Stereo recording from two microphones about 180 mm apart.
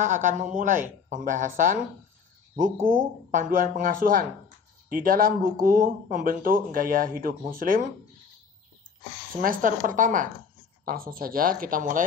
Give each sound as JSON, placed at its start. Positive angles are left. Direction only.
{"t": 0.0, "sound": "speech", "side_deg": -45}
{"t": 3.3, "sound": "speech", "side_deg": -45}
{"t": 9.4, "sound": "speech", "side_deg": -50}